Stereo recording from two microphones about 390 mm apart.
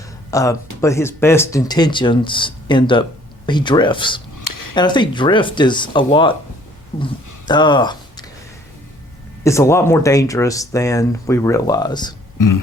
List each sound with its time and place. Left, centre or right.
0.3 s speech: centre
4.4 s cutlery: left
4.7 s speech: centre
7.4 s speech: centre
9.4 s speech: centre
12.4 s a sound: left